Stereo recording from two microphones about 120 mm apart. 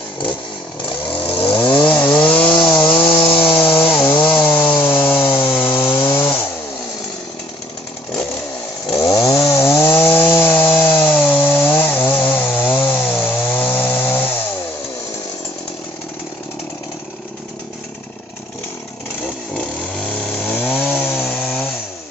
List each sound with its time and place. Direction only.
0.8 s vehicle: 45° left (ahead or behind)
2.0 s chainsaw: 45° left (ahead or behind)
4.4 s chainsaw: 20° left (ahead or behind)
4.8 s sawing: 15° left (ahead or behind)
5.5 s chainsaw: 15° left (ahead or behind)
5.9 s chainsaw: 40° left (ahead or behind)
9.0 s chainsaw: 30° left (ahead or behind)
19.5 s chainsaw: 10° left (ahead or behind)
21.3 s chainsaw: 5° left (ahead or behind)